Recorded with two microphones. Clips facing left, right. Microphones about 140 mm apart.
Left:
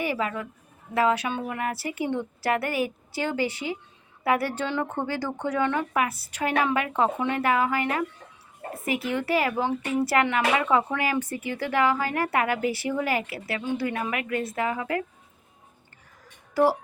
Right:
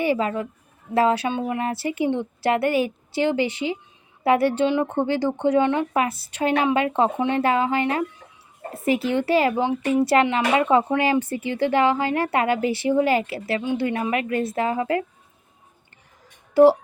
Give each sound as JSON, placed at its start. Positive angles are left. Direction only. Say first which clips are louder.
{"t": 0.0, "sound": "a woman's voice", "louder": "right 6 dB", "side_deg": -30}
{"t": 16.6, "sound": "a woman's voice", "louder": "right 8 dB", "side_deg": -25}